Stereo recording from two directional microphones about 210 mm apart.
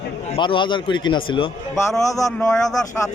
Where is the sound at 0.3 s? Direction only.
20° left (ahead or behind).